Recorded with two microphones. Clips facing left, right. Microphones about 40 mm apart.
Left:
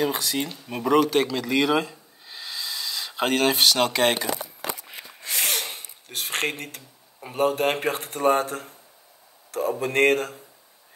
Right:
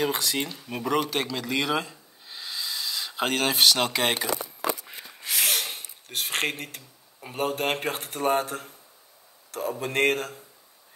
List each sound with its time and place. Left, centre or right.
0.0 s speech: right
0.7 s speech: centre